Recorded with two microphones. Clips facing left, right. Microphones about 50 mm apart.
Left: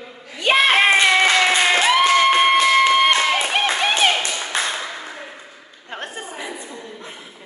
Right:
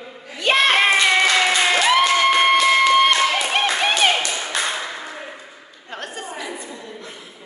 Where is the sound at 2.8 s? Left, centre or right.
Centre.